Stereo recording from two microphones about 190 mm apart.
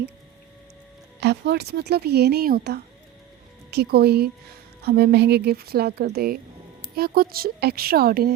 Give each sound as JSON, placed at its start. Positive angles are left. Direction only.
{"t": 1.2, "sound": "speech", "side_deg": -60}